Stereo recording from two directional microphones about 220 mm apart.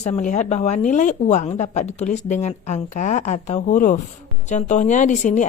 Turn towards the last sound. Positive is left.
turn(degrees=35)  # may be behind; listen again after turning